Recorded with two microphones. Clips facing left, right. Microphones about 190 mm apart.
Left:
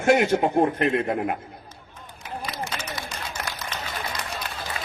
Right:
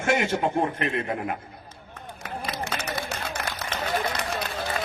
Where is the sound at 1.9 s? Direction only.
60° right (ahead or behind).